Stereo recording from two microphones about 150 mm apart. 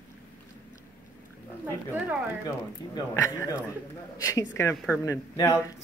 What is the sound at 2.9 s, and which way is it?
Speech, 25° left (ahead or behind).